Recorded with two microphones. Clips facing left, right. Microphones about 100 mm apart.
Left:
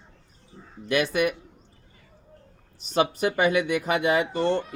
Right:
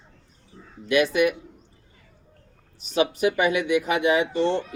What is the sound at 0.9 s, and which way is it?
Speech, 45° left (ahead or behind).